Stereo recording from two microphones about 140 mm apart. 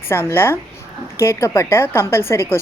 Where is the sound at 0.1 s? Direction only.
15° left (ahead or behind).